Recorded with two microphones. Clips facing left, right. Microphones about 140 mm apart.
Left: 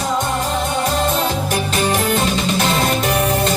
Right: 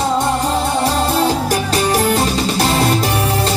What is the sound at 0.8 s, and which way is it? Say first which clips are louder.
Music: right 3 dB; 35° right (ahead or behind).